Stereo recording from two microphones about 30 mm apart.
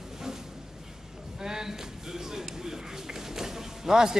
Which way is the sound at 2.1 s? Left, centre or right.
Centre.